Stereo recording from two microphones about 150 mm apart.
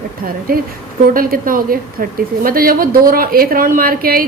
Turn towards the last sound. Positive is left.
turn(degrees=-75)  # may be behind; listen again after turning